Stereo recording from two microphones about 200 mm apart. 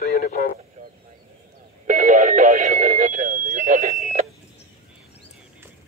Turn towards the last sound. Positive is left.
turn(degrees=-35)  # may be behind; listen again after turning